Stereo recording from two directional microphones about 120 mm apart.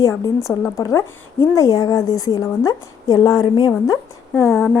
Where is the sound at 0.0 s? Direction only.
25° left (ahead or behind); by 3.7 s 40° left (ahead or behind).